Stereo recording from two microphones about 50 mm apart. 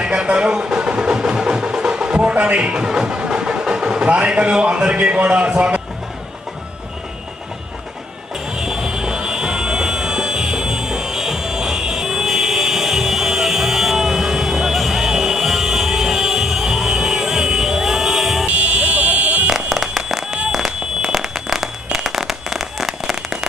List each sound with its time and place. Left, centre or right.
0.0 s music: centre
2.2 s speech: right
8.5 s a sound: centre
18.4 s buzzer: right
19.5 s music: centre
20.0 s a sound: centre
20.5 s fireworks: centre
21.9 s firecracker: centre